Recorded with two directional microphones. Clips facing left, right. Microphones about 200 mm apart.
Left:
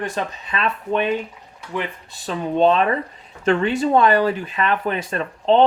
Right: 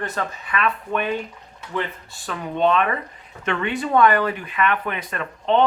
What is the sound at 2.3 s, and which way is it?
Speech, 30° left (ahead or behind).